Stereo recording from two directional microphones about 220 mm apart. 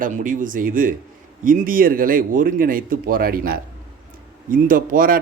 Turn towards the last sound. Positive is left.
turn(degrees=-40)  # may be behind; listen again after turning